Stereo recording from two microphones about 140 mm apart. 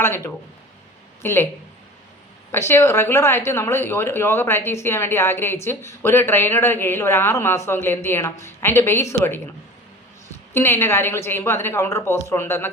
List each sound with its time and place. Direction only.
0.0 s speech: 15° left (ahead or behind)
2.5 s speech: 15° left (ahead or behind)
10.5 s speech: 15° left (ahead or behind)